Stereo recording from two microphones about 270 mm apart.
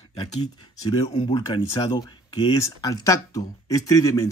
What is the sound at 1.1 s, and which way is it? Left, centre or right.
Speech, centre.